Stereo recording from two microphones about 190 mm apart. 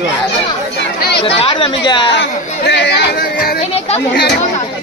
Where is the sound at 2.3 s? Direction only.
60° left (ahead or behind).